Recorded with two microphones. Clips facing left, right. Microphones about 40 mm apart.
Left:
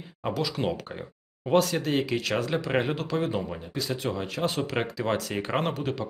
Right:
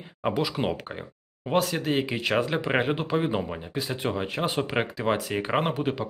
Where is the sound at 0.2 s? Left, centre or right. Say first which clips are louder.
Right 2 dB; centre.